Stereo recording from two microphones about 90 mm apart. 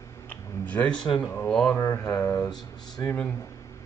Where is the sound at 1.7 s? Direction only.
30° left (ahead or behind).